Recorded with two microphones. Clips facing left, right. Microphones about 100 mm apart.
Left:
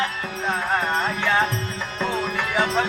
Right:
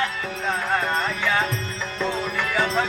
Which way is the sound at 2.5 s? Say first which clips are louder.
Left 1 dB; 10° left (ahead or behind).